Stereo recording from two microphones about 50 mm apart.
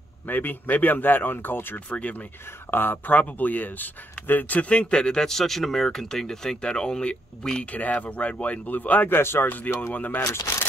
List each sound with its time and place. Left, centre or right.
0.3 s speech: left
1.9 s speech: left
2.7 s speech: left; by 7.6 s centre
7.7 s speech: left
9.1 s speech: left
9.9 s speech: left